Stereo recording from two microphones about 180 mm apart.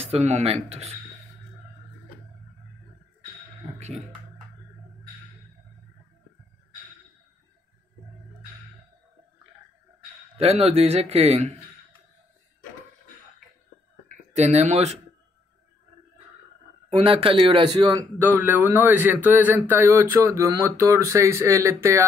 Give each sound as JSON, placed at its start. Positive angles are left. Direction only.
{"t": 0.0, "sound": "a man's voice", "side_deg": -35}
{"t": 10.3, "sound": "a man's voice", "side_deg": -35}
{"t": 14.0, "sound": "speech", "side_deg": -40}
{"t": 16.9, "sound": "a man's voice", "side_deg": -30}
{"t": 18.2, "sound": "a man's voice", "side_deg": -10}